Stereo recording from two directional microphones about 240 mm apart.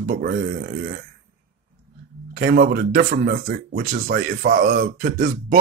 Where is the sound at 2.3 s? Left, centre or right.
Right.